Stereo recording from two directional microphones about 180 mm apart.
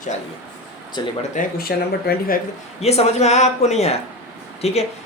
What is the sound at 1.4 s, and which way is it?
Speech, 55° left (ahead or behind).